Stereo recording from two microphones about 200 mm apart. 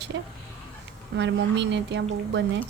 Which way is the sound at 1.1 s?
60° right (ahead or behind).